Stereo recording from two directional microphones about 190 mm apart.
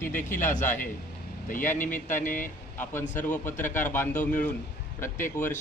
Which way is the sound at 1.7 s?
45° left (ahead or behind).